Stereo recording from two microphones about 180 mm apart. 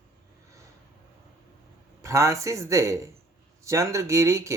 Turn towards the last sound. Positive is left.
turn(degrees=-15)  # may be behind; listen again after turning